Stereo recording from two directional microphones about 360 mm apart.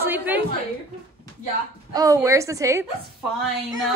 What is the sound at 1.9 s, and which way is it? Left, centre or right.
Speech, centre.